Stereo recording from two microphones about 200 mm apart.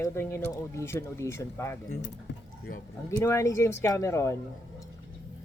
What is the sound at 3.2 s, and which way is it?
Speech, 15° left (ahead or behind).